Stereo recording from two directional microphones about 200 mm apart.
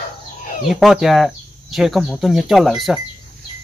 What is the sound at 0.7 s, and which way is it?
A woman's voice, centre (ahead or behind).